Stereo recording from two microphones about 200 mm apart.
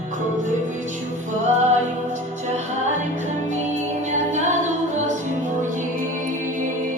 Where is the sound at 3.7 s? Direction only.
35° right (ahead or behind).